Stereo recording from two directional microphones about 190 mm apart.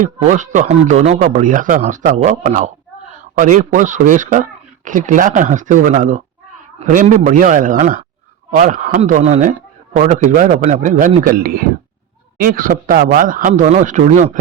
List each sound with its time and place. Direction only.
0.0 s a man's voice: 40° right (ahead or behind)